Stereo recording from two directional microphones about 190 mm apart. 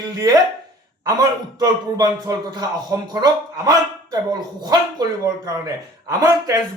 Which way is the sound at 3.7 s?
20° right (ahead or behind).